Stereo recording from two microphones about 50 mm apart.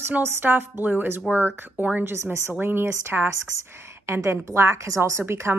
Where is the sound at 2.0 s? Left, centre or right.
Right.